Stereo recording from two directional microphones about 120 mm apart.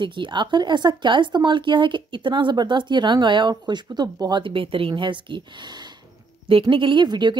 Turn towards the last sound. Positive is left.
turn(degrees=-40)  # may be behind; listen again after turning